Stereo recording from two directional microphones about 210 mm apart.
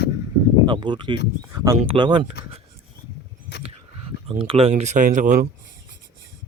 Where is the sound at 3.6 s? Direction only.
25° right (ahead or behind).